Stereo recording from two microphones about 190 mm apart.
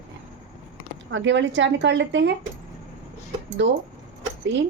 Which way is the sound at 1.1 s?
75° right (ahead or behind).